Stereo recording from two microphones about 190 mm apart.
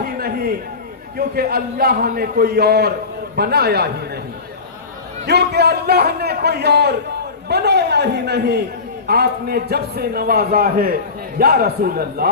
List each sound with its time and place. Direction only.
0.0 s a sound: 55° right (ahead or behind)
1.1 s a man's voice: 55° right (ahead or behind)
5.2 s a man's voice: 60° right (ahead or behind)